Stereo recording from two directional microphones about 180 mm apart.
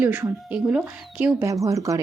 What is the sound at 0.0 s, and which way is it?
A woman's voice, 10° right (ahead or behind).